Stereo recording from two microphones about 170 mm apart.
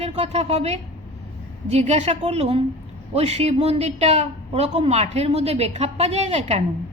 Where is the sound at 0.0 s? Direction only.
35° right (ahead or behind).